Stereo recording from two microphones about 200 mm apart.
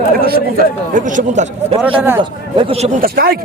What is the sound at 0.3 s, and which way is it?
Speech, 45° right (ahead or behind).